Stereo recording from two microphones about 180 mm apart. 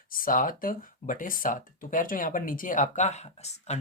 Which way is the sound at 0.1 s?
50° left (ahead or behind).